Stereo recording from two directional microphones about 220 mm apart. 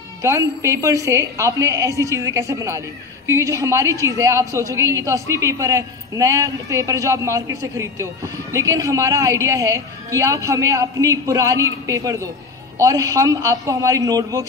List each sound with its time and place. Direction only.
0.2 s a woman's voice: 15° right (ahead or behind)